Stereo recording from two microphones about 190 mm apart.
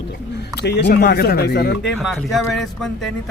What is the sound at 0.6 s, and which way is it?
Speech, 60° left (ahead or behind).